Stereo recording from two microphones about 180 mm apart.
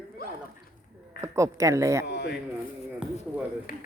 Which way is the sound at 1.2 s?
15° right (ahead or behind).